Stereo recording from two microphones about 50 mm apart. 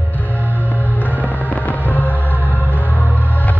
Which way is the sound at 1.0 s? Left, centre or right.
Left.